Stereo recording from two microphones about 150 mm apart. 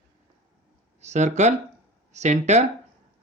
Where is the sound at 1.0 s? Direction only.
50° right (ahead or behind).